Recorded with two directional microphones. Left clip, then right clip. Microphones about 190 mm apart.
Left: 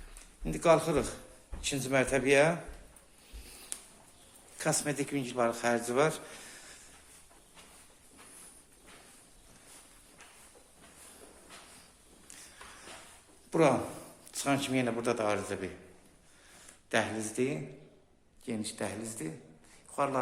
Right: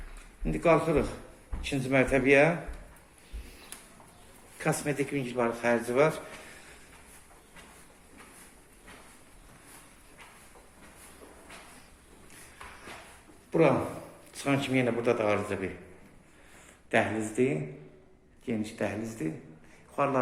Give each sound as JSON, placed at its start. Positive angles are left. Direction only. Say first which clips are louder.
{"t": 0.4, "sound": "a man's voice", "louder": "right 1 dB", "side_deg": 20}
{"t": 4.5, "sound": "a man's voice", "louder": "right 2 dB", "side_deg": 20}
{"t": 13.5, "sound": "speech", "louder": "right 2 dB", "side_deg": 25}
{"t": 16.9, "sound": "speech", "louder": "right 4 dB", "side_deg": 15}